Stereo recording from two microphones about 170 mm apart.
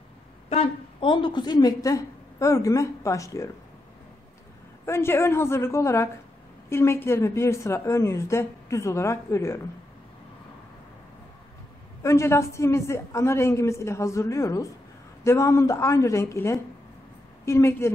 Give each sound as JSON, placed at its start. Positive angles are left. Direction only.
{"t": 0.5, "sound": "a woman's voice", "side_deg": 35}
{"t": 4.8, "sound": "a woman's voice", "side_deg": 15}
{"t": 12.0, "sound": "a woman's voice", "side_deg": 15}